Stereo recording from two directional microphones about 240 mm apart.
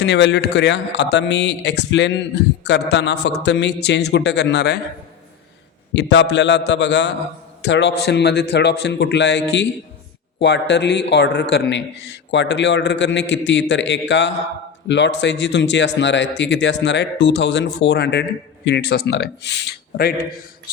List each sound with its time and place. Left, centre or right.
0.0 s a man's voice: left
6.0 s a man's voice: left